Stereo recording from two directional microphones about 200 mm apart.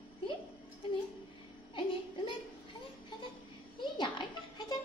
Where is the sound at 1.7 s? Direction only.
25° left (ahead or behind).